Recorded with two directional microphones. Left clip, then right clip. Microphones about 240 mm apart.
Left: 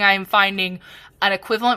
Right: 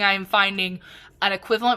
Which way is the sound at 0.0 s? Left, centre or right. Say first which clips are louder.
Left 4 dB; centre.